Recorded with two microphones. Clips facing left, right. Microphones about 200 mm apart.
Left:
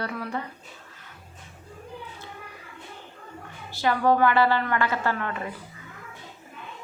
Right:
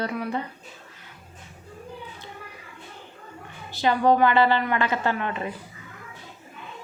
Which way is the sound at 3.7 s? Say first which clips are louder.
Right 2 dB; 20° right (ahead or behind).